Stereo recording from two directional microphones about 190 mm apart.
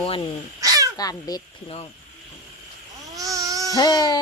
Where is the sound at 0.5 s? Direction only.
20° right (ahead or behind).